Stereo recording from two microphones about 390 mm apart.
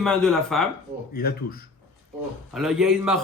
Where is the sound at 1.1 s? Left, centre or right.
Left.